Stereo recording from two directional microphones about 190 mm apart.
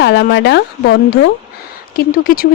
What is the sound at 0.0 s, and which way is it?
Speech, 60° left (ahead or behind).